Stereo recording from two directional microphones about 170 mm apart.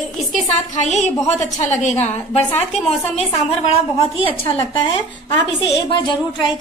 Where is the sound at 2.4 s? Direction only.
10° left (ahead or behind).